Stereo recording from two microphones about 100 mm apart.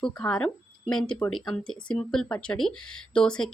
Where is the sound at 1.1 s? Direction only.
40° left (ahead or behind).